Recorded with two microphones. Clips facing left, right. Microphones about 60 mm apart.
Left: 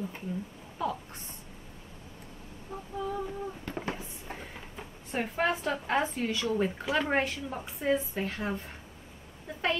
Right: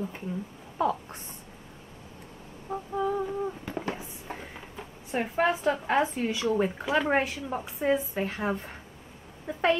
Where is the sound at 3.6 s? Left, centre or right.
Centre.